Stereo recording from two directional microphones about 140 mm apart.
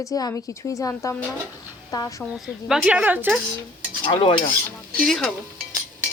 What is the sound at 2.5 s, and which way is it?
Speech, 5° right (ahead or behind).